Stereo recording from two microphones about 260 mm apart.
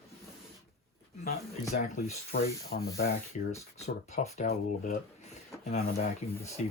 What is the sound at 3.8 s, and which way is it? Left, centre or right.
Speech, left.